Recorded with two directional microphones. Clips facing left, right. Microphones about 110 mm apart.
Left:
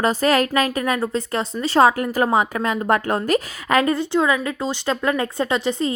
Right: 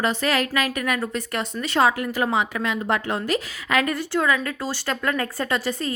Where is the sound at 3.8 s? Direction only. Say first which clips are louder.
Left 4 dB; 25° left (ahead or behind).